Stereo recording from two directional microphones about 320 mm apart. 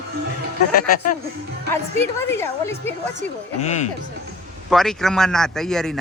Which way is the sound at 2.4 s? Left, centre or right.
Centre.